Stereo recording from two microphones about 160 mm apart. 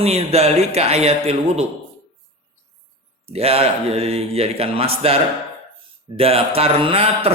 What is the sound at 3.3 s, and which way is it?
Speech, 40° right (ahead or behind).